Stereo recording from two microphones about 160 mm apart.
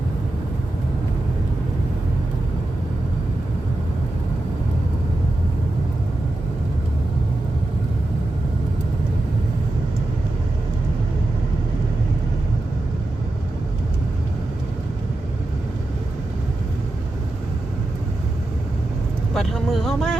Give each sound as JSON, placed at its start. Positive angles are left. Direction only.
{"t": 19.3, "sound": "vehicle", "side_deg": 0}